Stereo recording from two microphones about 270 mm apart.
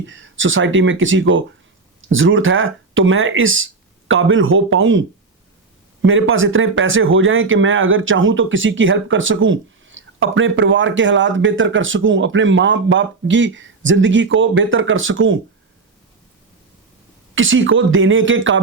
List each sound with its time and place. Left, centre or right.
0.0 s speech: right
17.3 s speech: right